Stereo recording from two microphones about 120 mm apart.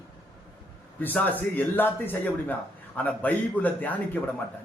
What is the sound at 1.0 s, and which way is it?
A man's voice, 15° left (ahead or behind).